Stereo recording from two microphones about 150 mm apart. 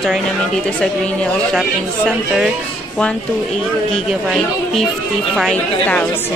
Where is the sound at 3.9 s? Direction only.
Centre (ahead or behind).